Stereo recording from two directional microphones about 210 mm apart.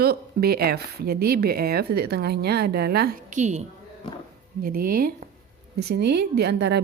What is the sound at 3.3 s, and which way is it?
Speech, 35° right (ahead or behind).